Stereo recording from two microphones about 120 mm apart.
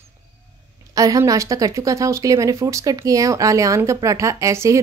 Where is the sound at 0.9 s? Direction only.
30° right (ahead or behind).